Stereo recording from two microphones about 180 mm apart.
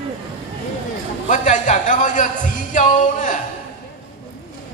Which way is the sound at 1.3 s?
45° left (ahead or behind).